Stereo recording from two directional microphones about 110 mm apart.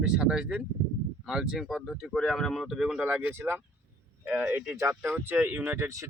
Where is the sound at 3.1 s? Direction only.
15° right (ahead or behind).